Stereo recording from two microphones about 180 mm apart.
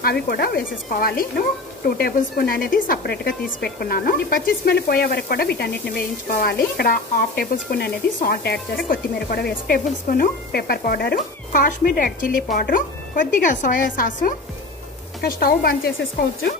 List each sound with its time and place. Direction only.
0.0 s speech: 60° left (ahead or behind)
11.1 s speech: 50° left (ahead or behind)
15.3 s speech: 55° left (ahead or behind)